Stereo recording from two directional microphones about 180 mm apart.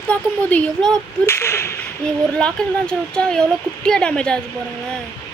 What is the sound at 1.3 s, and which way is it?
Speech, 15° left (ahead or behind).